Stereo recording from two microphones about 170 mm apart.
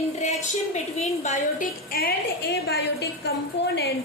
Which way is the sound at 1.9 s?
65° left (ahead or behind).